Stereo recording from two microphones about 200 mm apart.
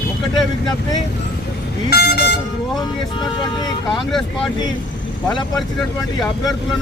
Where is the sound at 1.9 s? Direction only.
55° left (ahead or behind).